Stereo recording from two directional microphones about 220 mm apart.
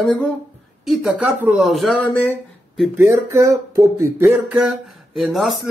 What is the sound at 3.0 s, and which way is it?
Speech, 15° right (ahead or behind).